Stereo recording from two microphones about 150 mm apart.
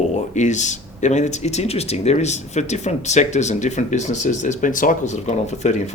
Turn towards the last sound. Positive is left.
turn(degrees=50)  # may be behind; listen again after turning